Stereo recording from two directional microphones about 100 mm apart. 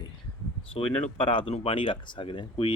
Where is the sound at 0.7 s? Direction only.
60° left (ahead or behind).